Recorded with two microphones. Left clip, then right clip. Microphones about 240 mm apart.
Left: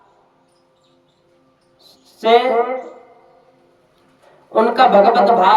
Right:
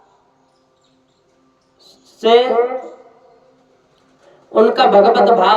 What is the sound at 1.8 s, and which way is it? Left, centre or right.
Music, centre.